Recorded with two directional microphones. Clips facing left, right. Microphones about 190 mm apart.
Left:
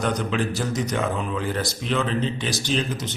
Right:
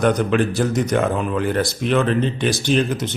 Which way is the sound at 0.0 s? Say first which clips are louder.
Right 7 dB; 60° right (ahead or behind).